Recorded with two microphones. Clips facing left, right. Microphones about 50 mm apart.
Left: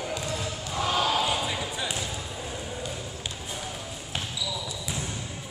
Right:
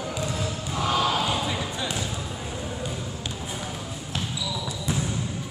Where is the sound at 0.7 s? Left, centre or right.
Centre.